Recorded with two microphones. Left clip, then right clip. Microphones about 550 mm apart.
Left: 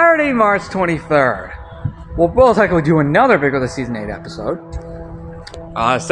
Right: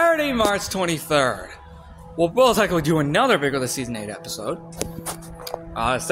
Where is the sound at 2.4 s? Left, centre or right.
Right.